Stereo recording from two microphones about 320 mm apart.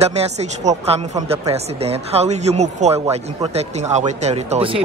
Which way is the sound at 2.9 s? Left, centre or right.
Centre.